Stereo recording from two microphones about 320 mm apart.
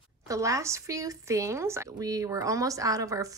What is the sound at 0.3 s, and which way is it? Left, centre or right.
A woman's voice, centre.